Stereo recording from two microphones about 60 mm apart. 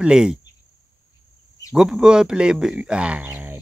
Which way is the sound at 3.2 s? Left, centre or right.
Right.